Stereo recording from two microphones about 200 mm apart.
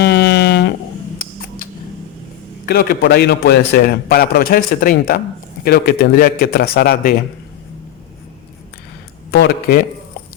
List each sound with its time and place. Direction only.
0.0 s a sound: 55° left (ahead or behind)
2.6 s a man's voice: 50° left (ahead or behind)
9.3 s a man's voice: 55° left (ahead or behind)